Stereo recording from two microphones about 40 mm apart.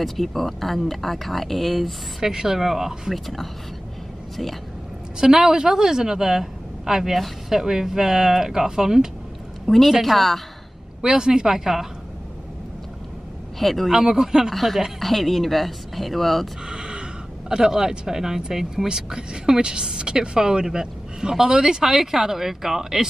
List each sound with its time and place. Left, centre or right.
0.0 s speech: centre
2.2 s a woman's voice: centre
5.2 s a woman's voice: centre
9.7 s speech: centre
11.0 s a woman's voice: centre
13.6 s speech: centre
13.9 s a woman's voice: centre
14.5 s speech: centre
16.6 s a sound: centre
17.5 s a woman's voice: centre